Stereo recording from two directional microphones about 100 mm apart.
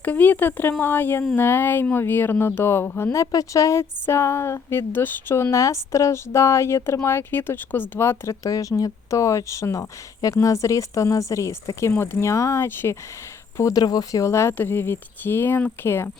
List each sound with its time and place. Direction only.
0.0 s speech: 15° left (ahead or behind)